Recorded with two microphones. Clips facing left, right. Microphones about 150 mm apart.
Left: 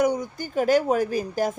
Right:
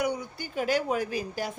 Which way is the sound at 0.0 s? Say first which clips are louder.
Left 7 dB; 45° left (ahead or behind).